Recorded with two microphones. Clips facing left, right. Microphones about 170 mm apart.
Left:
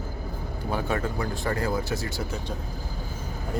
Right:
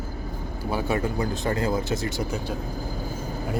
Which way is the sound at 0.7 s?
10° right (ahead or behind).